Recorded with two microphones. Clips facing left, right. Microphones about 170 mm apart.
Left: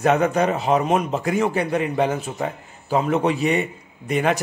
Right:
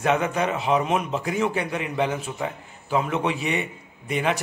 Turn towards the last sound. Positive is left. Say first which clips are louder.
# left 4 dB
turn(degrees=50)  # may be behind; listen again after turning